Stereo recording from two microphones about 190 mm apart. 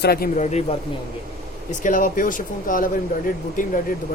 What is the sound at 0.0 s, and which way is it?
Speech, 50° left (ahead or behind).